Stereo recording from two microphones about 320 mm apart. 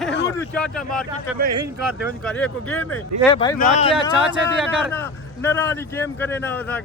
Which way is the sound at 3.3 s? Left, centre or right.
Centre.